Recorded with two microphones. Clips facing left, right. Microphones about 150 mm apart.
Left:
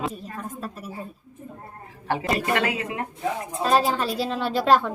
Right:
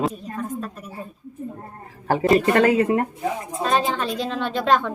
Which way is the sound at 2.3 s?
40° right (ahead or behind).